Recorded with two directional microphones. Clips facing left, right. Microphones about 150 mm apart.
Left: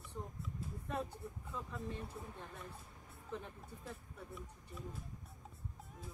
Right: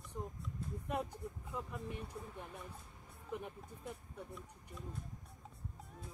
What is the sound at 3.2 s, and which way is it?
Music, 15° right (ahead or behind).